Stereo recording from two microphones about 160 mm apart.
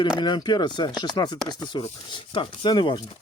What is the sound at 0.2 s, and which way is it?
Speech, 25° left (ahead or behind).